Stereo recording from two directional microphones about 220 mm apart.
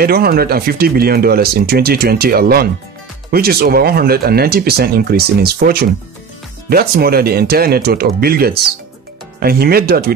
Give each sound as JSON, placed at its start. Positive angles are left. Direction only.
{"t": 0.0, "sound": "speech", "side_deg": -45}